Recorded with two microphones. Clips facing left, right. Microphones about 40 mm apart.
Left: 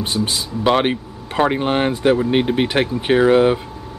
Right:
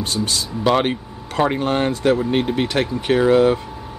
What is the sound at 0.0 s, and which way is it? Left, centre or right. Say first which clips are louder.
Speech: left 1 dB; left.